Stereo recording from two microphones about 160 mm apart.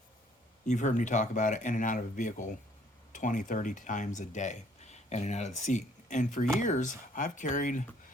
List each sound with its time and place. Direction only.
0.7 s speech: 50° left (ahead or behind)